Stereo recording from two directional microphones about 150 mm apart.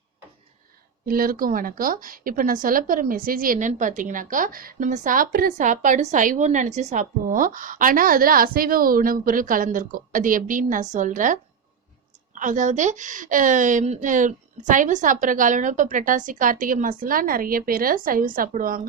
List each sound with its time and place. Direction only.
1.0 s speech: 75° right (ahead or behind)